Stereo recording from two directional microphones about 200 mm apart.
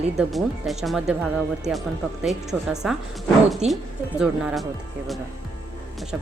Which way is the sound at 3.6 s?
35° right (ahead or behind).